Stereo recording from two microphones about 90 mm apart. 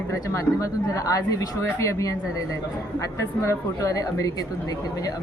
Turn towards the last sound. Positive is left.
turn(degrees=40)  # may be behind; listen again after turning